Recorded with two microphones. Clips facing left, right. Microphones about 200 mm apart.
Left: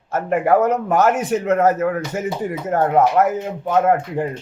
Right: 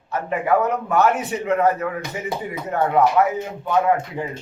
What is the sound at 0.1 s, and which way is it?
A man's voice, 45° left (ahead or behind).